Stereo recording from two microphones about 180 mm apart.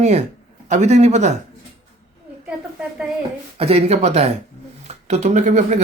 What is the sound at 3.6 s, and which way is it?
Speech, 35° right (ahead or behind).